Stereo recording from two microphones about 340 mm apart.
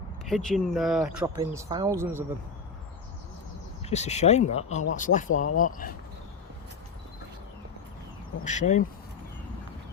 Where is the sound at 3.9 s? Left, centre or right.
Centre.